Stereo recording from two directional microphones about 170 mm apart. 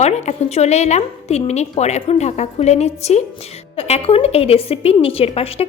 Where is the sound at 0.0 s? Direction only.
40° left (ahead or behind).